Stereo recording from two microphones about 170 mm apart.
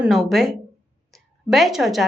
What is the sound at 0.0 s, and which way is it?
Speech, centre (ahead or behind).